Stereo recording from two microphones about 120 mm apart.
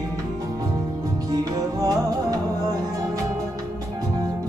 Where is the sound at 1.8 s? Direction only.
30° right (ahead or behind).